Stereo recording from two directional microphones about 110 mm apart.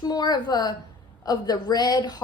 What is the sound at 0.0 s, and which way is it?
A woman's voice, 35° left (ahead or behind).